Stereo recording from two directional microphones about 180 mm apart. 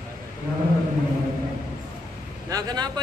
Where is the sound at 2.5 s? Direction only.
20° right (ahead or behind).